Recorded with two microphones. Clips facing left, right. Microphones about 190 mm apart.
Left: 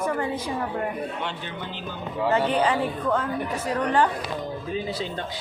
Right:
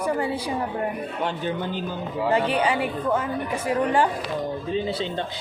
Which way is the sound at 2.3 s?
10° right (ahead or behind).